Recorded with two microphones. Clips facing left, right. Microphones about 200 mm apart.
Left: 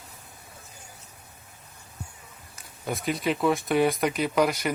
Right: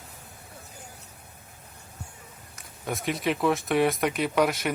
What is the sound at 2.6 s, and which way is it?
Speech, centre (ahead or behind).